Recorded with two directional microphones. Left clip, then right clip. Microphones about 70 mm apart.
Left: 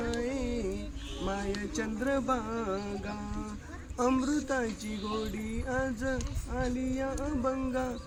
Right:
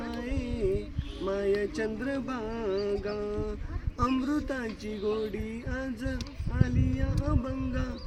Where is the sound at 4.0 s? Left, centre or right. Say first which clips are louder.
Even; left.